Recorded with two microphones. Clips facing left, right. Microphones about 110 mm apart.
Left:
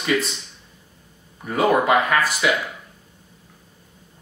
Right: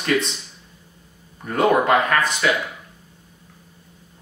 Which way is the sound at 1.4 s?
5° left (ahead or behind).